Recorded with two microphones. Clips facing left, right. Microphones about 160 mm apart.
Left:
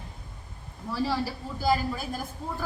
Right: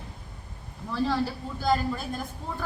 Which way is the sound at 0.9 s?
5° left (ahead or behind).